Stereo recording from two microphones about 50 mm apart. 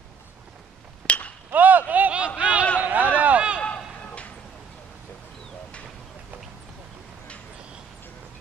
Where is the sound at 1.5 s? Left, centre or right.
Right.